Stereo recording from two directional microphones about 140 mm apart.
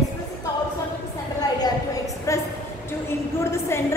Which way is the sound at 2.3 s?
20° left (ahead or behind).